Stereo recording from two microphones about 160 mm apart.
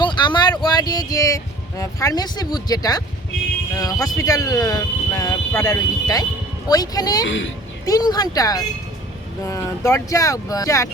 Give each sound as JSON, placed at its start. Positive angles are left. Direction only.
{"t": 0.0, "sound": "speech", "side_deg": 30}